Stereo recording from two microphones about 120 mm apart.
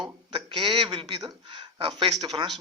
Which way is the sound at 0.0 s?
45° right (ahead or behind).